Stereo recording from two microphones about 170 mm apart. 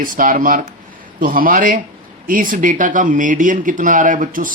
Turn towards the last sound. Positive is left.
turn(degrees=-50)  # may be behind; listen again after turning